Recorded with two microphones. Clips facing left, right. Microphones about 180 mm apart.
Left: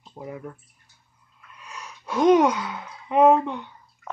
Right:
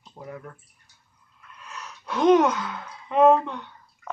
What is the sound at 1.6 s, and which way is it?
Speech, 10° left (ahead or behind).